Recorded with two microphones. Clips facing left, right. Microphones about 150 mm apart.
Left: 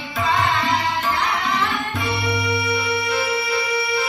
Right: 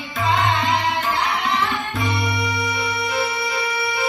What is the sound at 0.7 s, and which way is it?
Tabla, 20° right (ahead or behind).